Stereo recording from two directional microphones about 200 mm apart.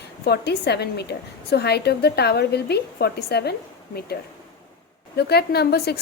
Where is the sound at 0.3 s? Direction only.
55° left (ahead or behind).